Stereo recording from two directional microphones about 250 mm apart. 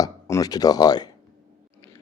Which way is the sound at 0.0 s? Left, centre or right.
Centre.